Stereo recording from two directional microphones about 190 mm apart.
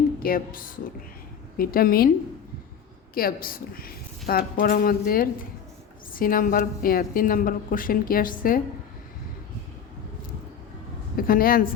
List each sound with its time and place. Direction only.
0.2 s a woman's voice: 50° left (ahead or behind)
3.2 s a woman's voice: 50° left (ahead or behind)
11.2 s a woman's voice: 50° left (ahead or behind)